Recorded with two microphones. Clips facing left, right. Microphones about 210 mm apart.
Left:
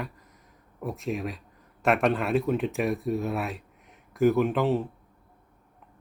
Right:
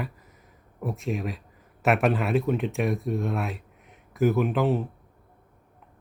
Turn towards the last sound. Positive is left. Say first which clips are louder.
# even
turn(degrees=0)  # may be behind; listen again after turning